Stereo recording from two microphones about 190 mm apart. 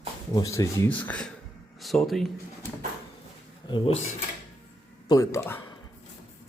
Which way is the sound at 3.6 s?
25° left (ahead or behind).